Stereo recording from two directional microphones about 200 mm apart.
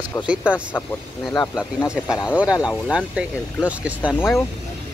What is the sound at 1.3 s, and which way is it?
Speech, 20° left (ahead or behind).